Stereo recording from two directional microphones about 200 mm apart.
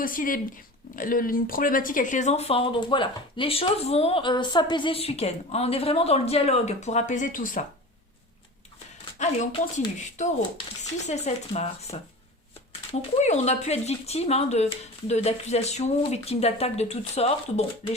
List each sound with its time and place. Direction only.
0.0 s speech: 45° left (ahead or behind)
9.1 s speech: 35° left (ahead or behind)